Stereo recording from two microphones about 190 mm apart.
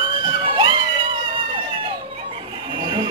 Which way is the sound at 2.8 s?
25° right (ahead or behind).